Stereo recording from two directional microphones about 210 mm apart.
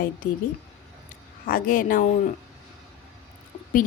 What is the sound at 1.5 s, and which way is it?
Speech, 40° left (ahead or behind).